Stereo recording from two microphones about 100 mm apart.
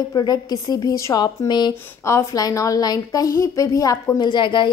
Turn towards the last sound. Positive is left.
turn(degrees=55)  # may be behind; listen again after turning